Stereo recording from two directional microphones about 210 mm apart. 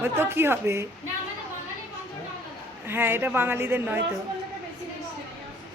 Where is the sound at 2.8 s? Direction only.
10° right (ahead or behind).